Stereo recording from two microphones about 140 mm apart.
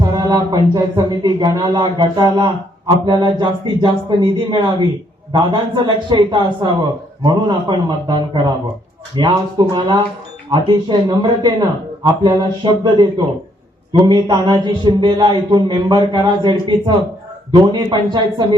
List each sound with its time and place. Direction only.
0.0 s a man's voice: 30° right (ahead or behind)